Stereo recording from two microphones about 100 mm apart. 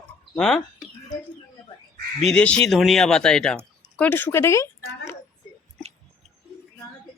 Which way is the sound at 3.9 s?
15° left (ahead or behind).